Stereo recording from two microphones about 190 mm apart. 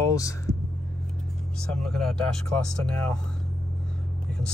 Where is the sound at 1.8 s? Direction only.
5° left (ahead or behind).